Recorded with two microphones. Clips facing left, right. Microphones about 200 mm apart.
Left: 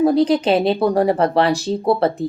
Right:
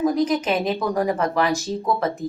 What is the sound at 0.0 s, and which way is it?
Speech, 35° left (ahead or behind).